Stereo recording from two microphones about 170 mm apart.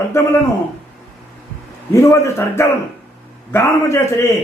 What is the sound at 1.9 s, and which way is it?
A man's voice, 20° left (ahead or behind).